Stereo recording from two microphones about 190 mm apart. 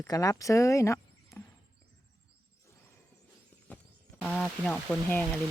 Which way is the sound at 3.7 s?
10° left (ahead or behind).